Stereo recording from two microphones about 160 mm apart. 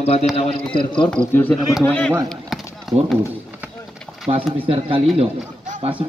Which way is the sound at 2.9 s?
Centre (ahead or behind).